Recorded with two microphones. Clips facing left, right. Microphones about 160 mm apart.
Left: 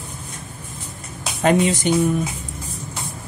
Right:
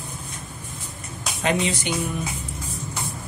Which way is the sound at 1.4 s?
45° left (ahead or behind).